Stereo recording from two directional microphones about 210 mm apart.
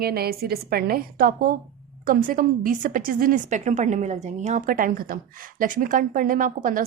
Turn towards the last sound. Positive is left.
turn(degrees=-40)  # may be behind; listen again after turning